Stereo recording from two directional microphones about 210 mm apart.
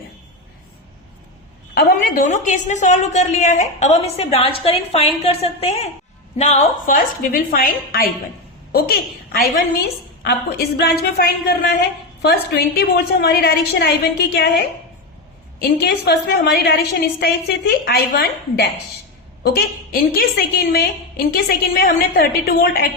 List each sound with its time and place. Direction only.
1.7 s a woman's voice: 45° left (ahead or behind)
15.5 s a woman's voice: 50° left (ahead or behind)